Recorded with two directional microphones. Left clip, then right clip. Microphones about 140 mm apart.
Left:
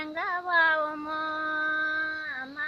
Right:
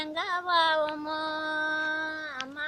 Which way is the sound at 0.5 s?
30° right (ahead or behind).